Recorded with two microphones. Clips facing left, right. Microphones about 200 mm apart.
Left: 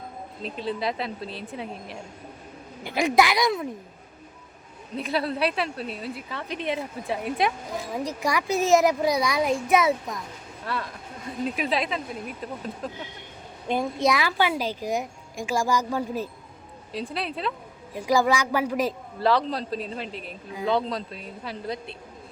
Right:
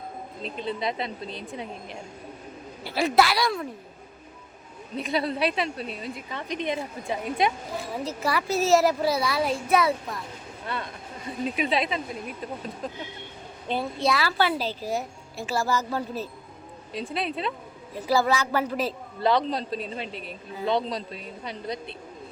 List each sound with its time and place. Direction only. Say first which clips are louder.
0.4 s a woman's voice: left 1 dB; centre (ahead or behind)
2.8 s a woman's voice: left 1 dB; 15° left (ahead or behind)
4.9 s a woman's voice: even; centre (ahead or behind)
8.0 s a woman's voice: even; 15° left (ahead or behind)
11.4 s a woman's voice: right 1 dB; centre (ahead or behind)
13.7 s a woman's voice: left 2 dB; 15° left (ahead or behind)
16.9 s a woman's voice: right 1 dB; centre (ahead or behind)
17.9 s a woman's voice: left 1 dB; 15° left (ahead or behind)
19.2 s a woman's voice: even; centre (ahead or behind)